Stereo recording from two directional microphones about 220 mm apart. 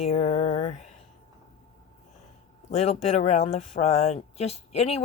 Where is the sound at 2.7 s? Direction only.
30° left (ahead or behind).